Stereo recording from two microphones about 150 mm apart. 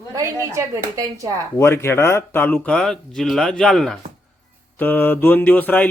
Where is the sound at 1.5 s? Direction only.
20° left (ahead or behind); by 4.0 s centre (ahead or behind).